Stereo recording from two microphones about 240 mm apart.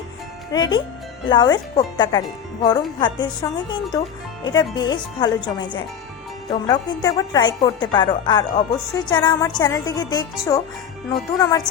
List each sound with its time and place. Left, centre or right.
0.5 s speech: centre